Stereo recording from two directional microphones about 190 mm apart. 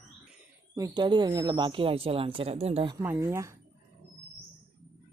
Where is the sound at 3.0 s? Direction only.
10° right (ahead or behind).